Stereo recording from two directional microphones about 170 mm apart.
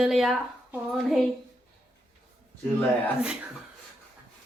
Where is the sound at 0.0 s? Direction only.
Centre (ahead or behind).